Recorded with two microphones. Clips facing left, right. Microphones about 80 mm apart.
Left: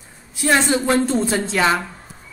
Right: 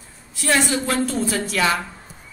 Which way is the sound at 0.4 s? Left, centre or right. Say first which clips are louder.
Left 3 dB; left.